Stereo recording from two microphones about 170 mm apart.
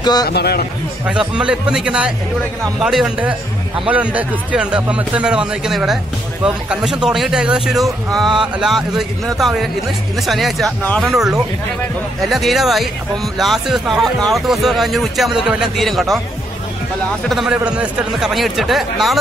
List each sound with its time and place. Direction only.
0.0 s a man's voice: 25° left (ahead or behind)
0.3 s a man's voice: 70° left (ahead or behind)
1.3 s speech: 5° right (ahead or behind)
17.3 s speech: 5° right (ahead or behind)